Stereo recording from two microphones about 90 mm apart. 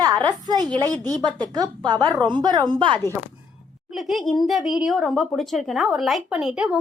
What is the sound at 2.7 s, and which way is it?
Speech, 65° right (ahead or behind).